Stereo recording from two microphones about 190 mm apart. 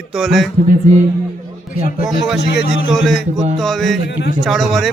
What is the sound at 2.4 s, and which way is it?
Speech, 60° left (ahead or behind).